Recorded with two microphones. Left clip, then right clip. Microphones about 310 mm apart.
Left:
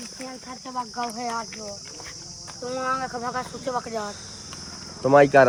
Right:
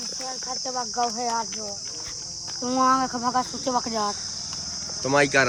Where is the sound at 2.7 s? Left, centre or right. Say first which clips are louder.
Right 6 dB; right.